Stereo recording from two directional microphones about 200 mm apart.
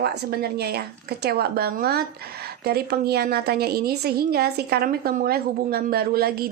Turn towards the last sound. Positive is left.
turn(degrees=-50)  # may be behind; listen again after turning